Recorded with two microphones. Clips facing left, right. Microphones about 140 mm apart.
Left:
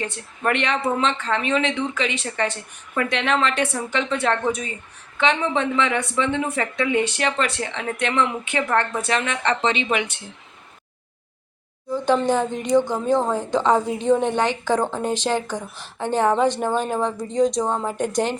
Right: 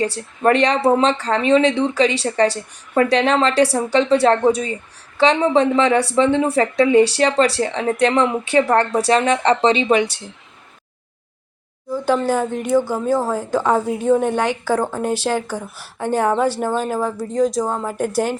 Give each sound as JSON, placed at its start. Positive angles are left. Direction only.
{"t": 0.0, "sound": "speech", "side_deg": -35}
{"t": 11.9, "sound": "a woman's voice", "side_deg": -10}